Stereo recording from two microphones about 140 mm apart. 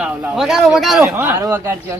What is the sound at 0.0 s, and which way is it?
A man's voice, 5° right (ahead or behind).